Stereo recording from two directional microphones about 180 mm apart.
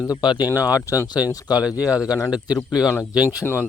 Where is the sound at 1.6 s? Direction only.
5° right (ahead or behind).